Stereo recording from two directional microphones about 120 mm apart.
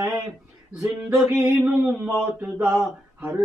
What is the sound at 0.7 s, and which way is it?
Music, centre (ahead or behind).